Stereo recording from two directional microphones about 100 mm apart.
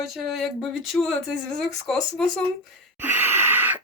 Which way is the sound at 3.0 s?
20° right (ahead or behind).